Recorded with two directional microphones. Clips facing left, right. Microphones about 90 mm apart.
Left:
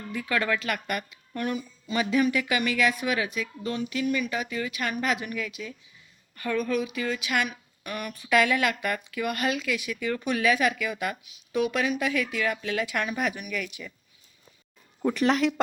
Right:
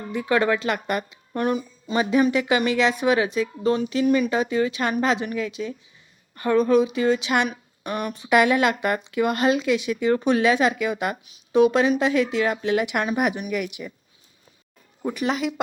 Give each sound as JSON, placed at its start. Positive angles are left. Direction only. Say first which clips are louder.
{"t": 0.0, "sound": "speech", "louder": "right 7 dB", "side_deg": -25}
{"t": 15.0, "sound": "speech", "louder": "left 1 dB", "side_deg": -5}